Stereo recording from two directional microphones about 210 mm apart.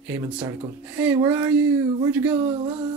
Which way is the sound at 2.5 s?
20° right (ahead or behind).